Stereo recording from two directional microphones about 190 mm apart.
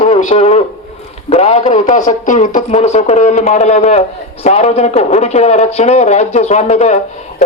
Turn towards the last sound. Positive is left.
turn(degrees=35)  # may be behind; listen again after turning